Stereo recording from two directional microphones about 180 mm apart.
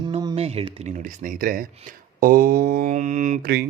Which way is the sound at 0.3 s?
35° right (ahead or behind).